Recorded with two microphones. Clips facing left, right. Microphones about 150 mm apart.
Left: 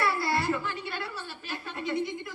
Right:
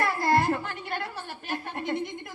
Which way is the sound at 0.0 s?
50° right (ahead or behind).